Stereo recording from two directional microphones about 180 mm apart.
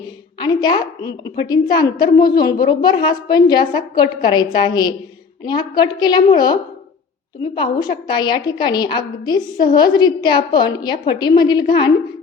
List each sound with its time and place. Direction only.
0.3 s a woman's voice: 25° left (ahead or behind)